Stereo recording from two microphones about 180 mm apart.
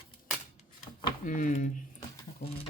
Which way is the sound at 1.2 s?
45° left (ahead or behind).